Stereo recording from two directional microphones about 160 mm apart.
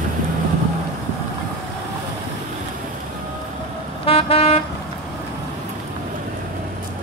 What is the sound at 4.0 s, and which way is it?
Vehicle, 35° left (ahead or behind).